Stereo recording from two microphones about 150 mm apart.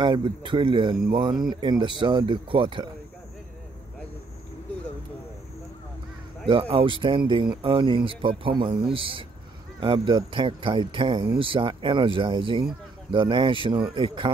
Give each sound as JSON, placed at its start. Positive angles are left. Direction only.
{"t": 0.0, "sound": "speech", "side_deg": -30}
{"t": 6.4, "sound": "speech", "side_deg": -35}